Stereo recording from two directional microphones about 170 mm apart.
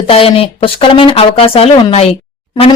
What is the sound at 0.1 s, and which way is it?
Speech, 35° left (ahead or behind).